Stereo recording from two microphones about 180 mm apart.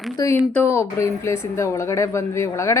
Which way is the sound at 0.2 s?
20° left (ahead or behind).